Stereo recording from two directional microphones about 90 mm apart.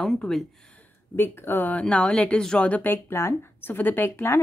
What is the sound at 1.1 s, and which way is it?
A woman's voice, 25° left (ahead or behind).